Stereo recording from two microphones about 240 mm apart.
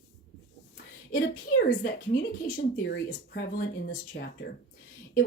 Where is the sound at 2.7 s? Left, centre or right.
Left.